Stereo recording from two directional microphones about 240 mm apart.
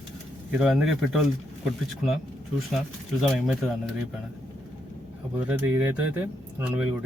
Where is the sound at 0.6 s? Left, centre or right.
Centre.